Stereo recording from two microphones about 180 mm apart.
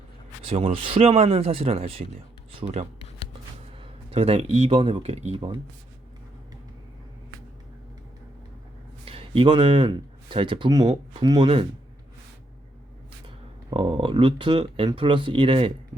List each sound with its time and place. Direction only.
0.4 s speech: 30° right (ahead or behind)
4.1 s speech: 35° right (ahead or behind)
9.0 s speech: 30° right (ahead or behind)
13.2 s speech: 30° right (ahead or behind)